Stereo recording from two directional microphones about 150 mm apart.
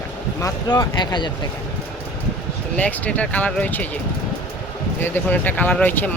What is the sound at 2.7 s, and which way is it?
Speech, 10° left (ahead or behind).